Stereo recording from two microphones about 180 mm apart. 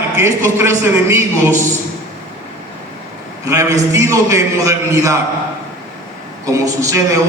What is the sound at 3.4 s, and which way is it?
A woman's voice, 15° right (ahead or behind).